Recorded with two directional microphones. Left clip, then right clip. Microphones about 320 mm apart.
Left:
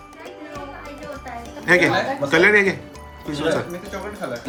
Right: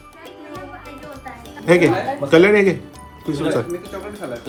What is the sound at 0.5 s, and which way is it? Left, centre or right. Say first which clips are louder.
Music: right 1 dB; centre.